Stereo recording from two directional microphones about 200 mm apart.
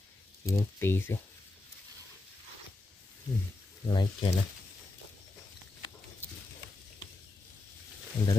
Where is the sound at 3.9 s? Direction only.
25° left (ahead or behind).